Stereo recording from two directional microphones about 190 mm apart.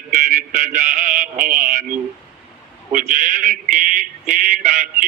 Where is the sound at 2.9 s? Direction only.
45° right (ahead or behind).